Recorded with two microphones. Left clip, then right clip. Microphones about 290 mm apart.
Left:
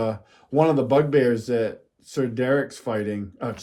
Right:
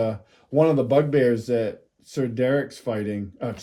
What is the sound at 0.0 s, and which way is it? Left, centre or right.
Speech, centre.